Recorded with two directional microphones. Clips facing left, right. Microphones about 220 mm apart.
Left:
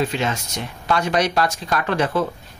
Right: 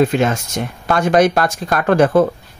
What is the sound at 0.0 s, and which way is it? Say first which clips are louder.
Speech: right 8 dB; 50° right (ahead or behind).